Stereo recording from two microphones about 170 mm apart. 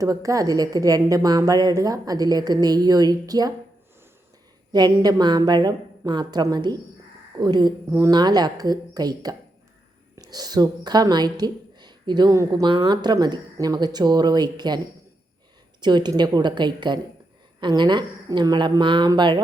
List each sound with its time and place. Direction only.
0.0 s a woman's voice: 20° right (ahead or behind)
4.7 s a woman's voice: 25° right (ahead or behind)
15.8 s a woman's voice: 25° right (ahead or behind)